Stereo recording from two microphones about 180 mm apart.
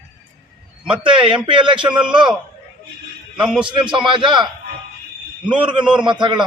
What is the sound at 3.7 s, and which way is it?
Speech, 25° right (ahead or behind).